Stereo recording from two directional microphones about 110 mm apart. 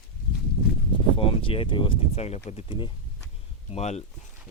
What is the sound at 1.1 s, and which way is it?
Speech, 55° left (ahead or behind).